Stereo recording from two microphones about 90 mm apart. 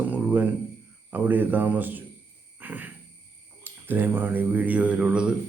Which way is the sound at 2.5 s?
20° right (ahead or behind).